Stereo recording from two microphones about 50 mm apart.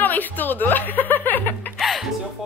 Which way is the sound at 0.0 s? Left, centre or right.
Left.